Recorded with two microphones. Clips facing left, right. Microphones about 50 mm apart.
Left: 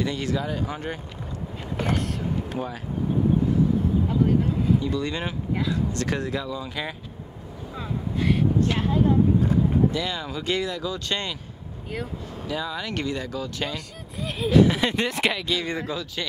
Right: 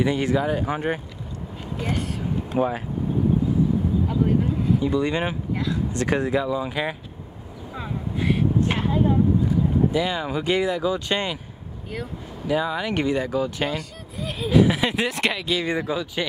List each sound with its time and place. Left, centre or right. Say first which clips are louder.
0.0 s speech: right 5 dB; right
1.9 s speech: even; centre
2.5 s speech: right 8 dB; right
4.1 s speech: even; centre
4.8 s speech: right 5 dB; centre
5.5 s speech: even; centre
5.9 s speech: right 5 dB; centre
7.7 s vehicle: even; centre
8.7 s speech: even; centre
12.4 s speech: right 6 dB; centre
13.7 s speech: right 2 dB; centre